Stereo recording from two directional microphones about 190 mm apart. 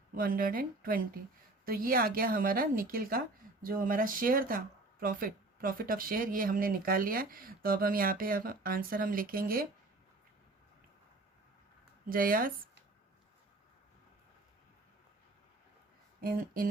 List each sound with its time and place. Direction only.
0.1 s a woman's voice: 50° right (ahead or behind)
12.0 s a woman's voice: 50° right (ahead or behind)